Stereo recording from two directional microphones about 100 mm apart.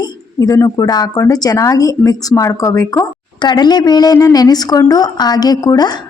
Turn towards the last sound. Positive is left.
turn(degrees=40)  # may be behind; listen again after turning